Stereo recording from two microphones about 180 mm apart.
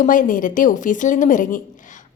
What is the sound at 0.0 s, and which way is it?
A woman's voice, 45° left (ahead or behind).